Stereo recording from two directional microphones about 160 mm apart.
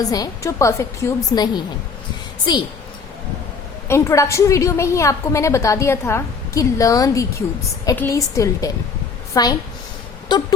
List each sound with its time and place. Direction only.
0.0 s a woman's voice: 20° left (ahead or behind)
3.8 s a woman's voice: 15° left (ahead or behind)